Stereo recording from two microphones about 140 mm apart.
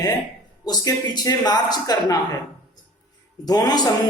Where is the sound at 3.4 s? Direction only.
30° left (ahead or behind).